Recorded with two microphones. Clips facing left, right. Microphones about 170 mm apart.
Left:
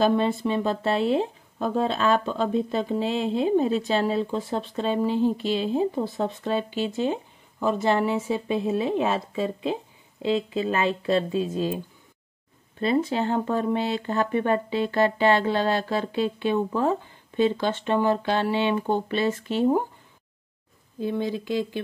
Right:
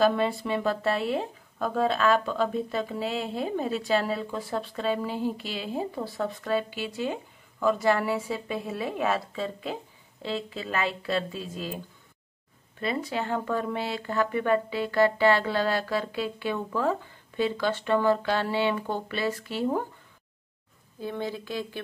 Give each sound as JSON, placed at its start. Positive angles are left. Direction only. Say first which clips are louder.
{"t": 0.0, "sound": "speech", "louder": "left 2 dB", "side_deg": 20}
{"t": 12.8, "sound": "speech", "louder": "left 6 dB", "side_deg": 25}
{"t": 21.0, "sound": "speech", "louder": "left 5 dB", "side_deg": 15}